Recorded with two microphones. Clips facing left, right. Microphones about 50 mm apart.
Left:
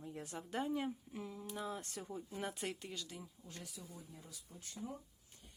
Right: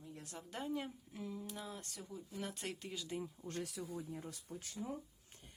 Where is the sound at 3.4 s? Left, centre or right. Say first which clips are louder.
Right 8 dB; right.